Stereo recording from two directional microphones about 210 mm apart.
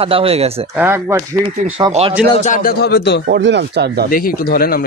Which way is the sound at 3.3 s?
55° right (ahead or behind).